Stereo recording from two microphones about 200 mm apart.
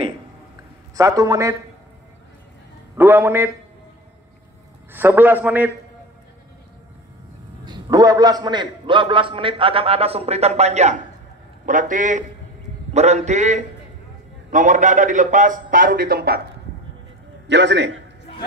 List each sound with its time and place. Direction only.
0.9 s a man's voice: 15° right (ahead or behind)
3.0 s a man's voice: 10° right (ahead or behind)
4.9 s a man's voice: 10° right (ahead or behind)
7.6 s a man's voice: 20° right (ahead or behind); by 16.3 s 50° right (ahead or behind)
17.5 s a man's voice: 60° right (ahead or behind)